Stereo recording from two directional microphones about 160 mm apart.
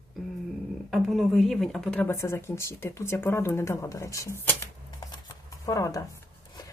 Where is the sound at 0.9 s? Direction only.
Centre (ahead or behind); by 4.7 s 15° left (ahead or behind).